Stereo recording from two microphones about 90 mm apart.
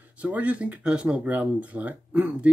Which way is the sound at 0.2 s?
15° right (ahead or behind).